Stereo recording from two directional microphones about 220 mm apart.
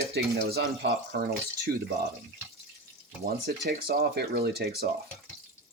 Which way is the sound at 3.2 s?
45° right (ahead or behind).